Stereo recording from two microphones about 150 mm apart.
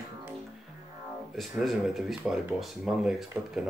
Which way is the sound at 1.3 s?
Centre (ahead or behind).